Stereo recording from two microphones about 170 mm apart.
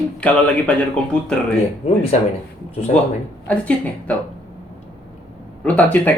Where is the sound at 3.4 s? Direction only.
10° left (ahead or behind).